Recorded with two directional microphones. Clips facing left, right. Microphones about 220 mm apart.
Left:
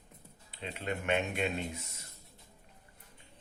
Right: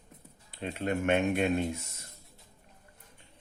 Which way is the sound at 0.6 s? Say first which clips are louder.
Right 6 dB; 50° right (ahead or behind).